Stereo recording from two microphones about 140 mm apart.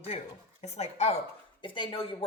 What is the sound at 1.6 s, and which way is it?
Speech, 35° left (ahead or behind).